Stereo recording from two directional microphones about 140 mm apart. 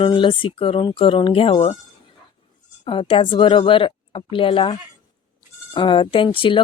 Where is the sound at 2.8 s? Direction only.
40° left (ahead or behind).